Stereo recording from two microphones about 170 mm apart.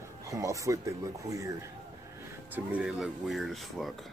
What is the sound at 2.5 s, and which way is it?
Speech, 5° right (ahead or behind).